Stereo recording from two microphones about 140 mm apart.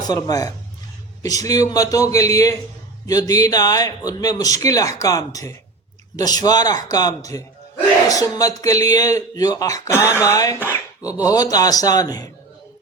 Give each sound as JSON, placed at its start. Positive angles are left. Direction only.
{"t": 0.0, "sound": "speech", "side_deg": 25}